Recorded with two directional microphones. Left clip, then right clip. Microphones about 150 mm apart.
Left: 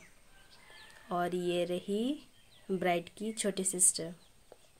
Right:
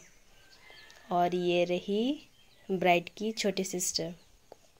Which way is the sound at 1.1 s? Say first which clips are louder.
Right 5 dB; 10° right (ahead or behind).